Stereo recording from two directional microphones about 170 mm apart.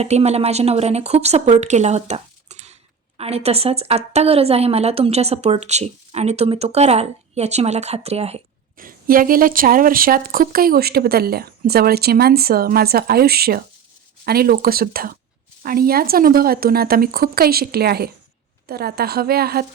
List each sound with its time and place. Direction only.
0.0 s a woman's voice: 40° right (ahead or behind)
8.8 s speech: 55° right (ahead or behind)